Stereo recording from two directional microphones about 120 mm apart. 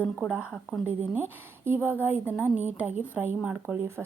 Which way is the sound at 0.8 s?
15° right (ahead or behind).